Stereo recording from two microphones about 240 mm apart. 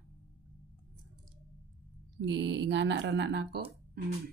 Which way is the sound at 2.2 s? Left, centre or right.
Right.